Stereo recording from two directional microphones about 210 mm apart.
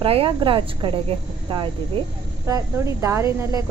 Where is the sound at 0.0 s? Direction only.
25° right (ahead or behind).